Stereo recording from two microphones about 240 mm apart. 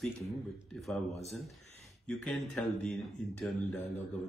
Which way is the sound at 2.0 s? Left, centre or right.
Centre.